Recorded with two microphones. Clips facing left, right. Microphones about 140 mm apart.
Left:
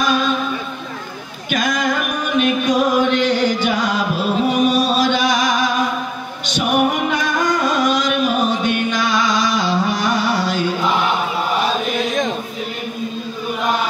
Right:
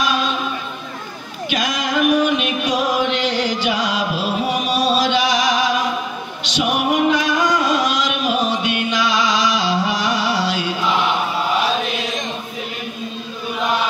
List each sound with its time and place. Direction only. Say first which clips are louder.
1.5 s music: left 2 dB; 50° left (ahead or behind)
4.6 s chant: left 2 dB; 50° left (ahead or behind)
6.4 s music: left 3 dB; 50° left (ahead or behind)